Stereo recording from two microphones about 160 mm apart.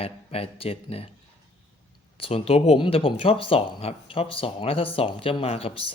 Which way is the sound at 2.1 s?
35° left (ahead or behind).